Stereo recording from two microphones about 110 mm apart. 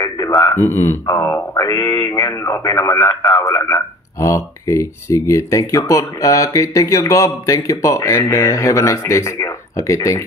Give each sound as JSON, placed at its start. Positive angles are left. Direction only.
{"t": 0.0, "sound": "a sound", "side_deg": 40}
{"t": 0.6, "sound": "speech", "side_deg": 25}
{"t": 1.5, "sound": "speech", "side_deg": 40}